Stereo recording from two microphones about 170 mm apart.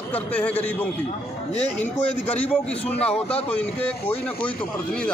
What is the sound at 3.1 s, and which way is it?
Speech, 35° left (ahead or behind).